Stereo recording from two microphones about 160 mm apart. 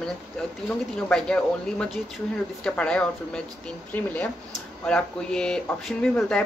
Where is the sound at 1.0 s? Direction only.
5° left (ahead or behind).